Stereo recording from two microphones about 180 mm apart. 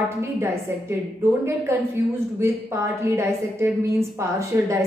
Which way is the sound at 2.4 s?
15° right (ahead or behind).